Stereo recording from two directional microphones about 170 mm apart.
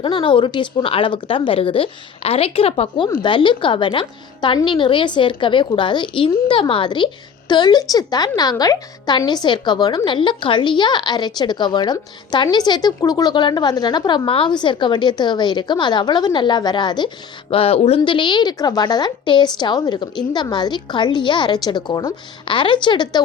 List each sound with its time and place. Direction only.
0.0 s a woman's voice: 30° left (ahead or behind)